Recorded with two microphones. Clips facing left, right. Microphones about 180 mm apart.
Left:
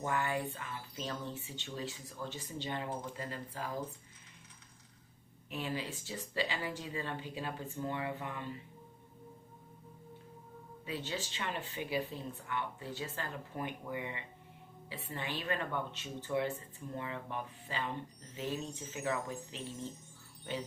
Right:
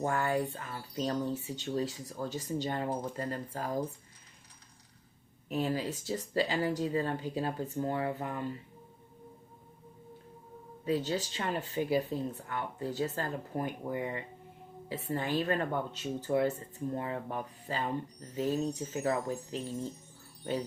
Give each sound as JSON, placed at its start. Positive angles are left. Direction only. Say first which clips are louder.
{"t": 0.0, "sound": "speech", "louder": "right 5 dB", "side_deg": -40}
{"t": 5.5, "sound": "speech", "louder": "right 7 dB", "side_deg": -40}
{"t": 10.8, "sound": "speech", "louder": "right 9 dB", "side_deg": -40}